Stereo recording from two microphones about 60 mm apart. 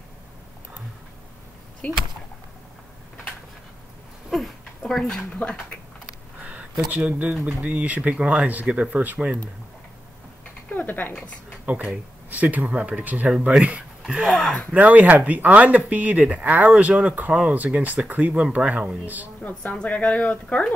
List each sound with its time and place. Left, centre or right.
4.3 s a sound: centre
5.3 s speech: centre
6.9 s speech: right
10.7 s dog: left
11.6 s speech: right
14.0 s a sound: centre
14.7 s speech: right
17.3 s a sound: centre
17.6 s speech: right
19.7 s speech: left